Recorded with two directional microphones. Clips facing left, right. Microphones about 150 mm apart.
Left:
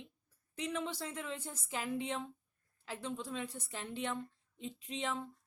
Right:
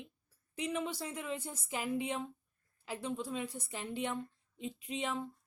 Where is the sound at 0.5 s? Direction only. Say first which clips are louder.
Right 2 dB; 10° right (ahead or behind).